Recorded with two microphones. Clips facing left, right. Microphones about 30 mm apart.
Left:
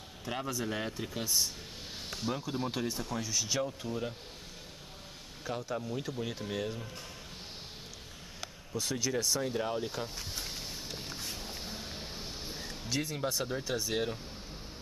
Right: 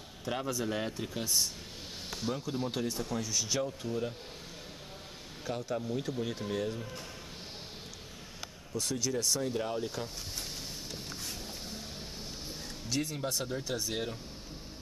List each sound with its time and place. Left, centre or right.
0.2 s speech: centre
5.4 s speech: centre
8.9 s speech: centre
9.2 s speech: centre
10.9 s vehicle: centre
13.5 s speech: centre